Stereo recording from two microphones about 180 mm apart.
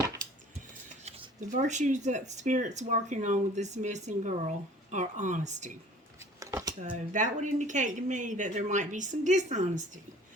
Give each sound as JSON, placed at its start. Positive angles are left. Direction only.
{"t": 1.0, "sound": "speech", "side_deg": -40}
{"t": 6.1, "sound": "a sound", "side_deg": -20}
{"t": 7.1, "sound": "speech", "side_deg": -45}